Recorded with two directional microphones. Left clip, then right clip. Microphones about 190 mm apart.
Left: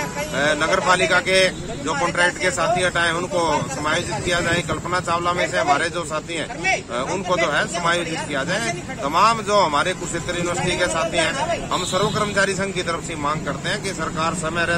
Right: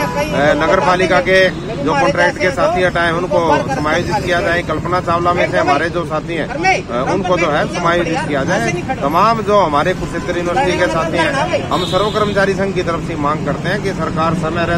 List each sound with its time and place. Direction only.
0.4 s speech: 15° left (ahead or behind)
7.2 s speech: 15° left (ahead or behind)
14.2 s speech: 15° left (ahead or behind)